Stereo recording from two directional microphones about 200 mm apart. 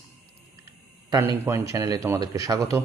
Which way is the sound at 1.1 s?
15° right (ahead or behind).